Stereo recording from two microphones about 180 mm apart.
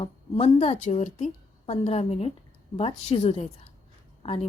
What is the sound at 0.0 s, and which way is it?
A woman's voice, 35° left (ahead or behind).